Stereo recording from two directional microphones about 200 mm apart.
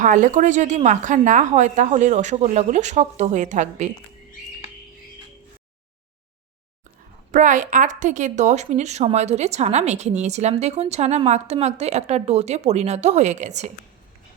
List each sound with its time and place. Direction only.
0.0 s speech: 40° right (ahead or behind)
7.3 s speech: 40° right (ahead or behind)